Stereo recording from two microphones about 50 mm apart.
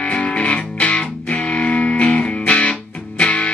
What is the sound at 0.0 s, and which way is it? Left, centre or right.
Music, left.